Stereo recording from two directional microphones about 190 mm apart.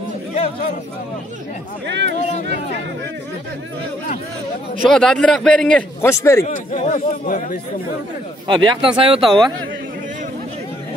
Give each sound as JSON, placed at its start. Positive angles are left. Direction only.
{"t": 0.3, "sound": "chatter", "side_deg": 30}
{"t": 1.9, "sound": "speech", "side_deg": -70}
{"t": 4.8, "sound": "a man's voice", "side_deg": 5}
{"t": 6.4, "sound": "speech", "side_deg": 40}
{"t": 8.5, "sound": "a man's voice", "side_deg": -25}